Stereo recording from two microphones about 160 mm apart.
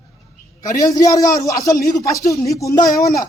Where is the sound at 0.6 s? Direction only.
20° left (ahead or behind).